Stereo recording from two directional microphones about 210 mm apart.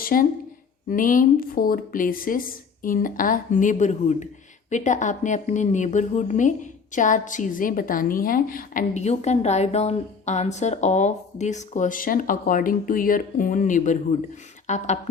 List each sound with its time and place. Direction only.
0.0 s a woman's voice: 40° left (ahead or behind)